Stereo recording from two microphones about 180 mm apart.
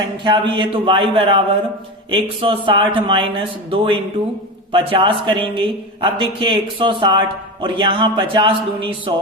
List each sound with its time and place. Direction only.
0.3 s a man's voice: 25° right (ahead or behind)